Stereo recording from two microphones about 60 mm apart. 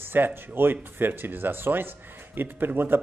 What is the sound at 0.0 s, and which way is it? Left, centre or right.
Speech, right.